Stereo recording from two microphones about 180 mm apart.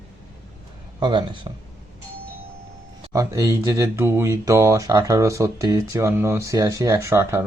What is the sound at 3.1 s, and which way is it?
Speech, 20° right (ahead or behind).